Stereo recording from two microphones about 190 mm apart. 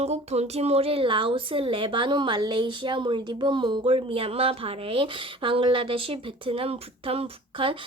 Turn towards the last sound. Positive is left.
turn(degrees=-25)  # may be behind; listen again after turning